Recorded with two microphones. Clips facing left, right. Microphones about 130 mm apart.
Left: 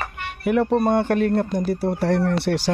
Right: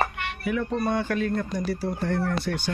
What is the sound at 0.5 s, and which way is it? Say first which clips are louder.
Speech: left 8 dB; 55° left (ahead or behind).